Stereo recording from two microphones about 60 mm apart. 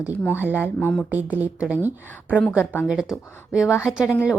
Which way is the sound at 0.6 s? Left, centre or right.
Left.